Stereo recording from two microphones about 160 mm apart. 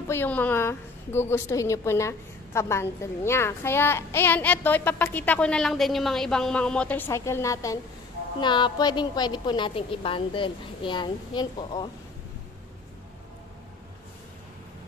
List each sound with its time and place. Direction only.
0.1 s a woman's voice: 10° left (ahead or behind); by 11.9 s 30° left (ahead or behind)